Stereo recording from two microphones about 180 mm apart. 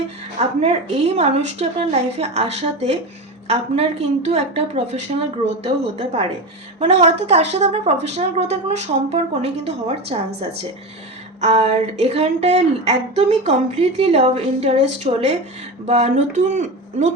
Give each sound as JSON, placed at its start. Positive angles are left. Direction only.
{"t": 0.3, "sound": "speech", "side_deg": -35}
{"t": 11.3, "sound": "speech", "side_deg": -35}